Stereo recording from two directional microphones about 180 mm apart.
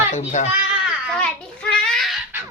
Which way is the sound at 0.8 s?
5° right (ahead or behind).